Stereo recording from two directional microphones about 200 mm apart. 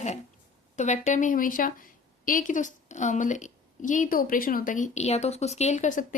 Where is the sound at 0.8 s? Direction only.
35° left (ahead or behind).